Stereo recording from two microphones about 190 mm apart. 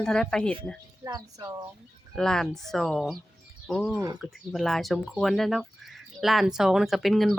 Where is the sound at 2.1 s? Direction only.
5° left (ahead or behind).